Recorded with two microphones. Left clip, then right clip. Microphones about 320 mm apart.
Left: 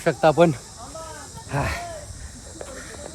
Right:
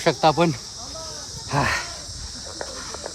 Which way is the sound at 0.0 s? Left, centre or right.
Centre.